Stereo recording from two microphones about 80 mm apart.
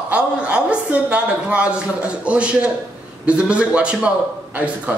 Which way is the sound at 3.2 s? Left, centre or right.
Centre.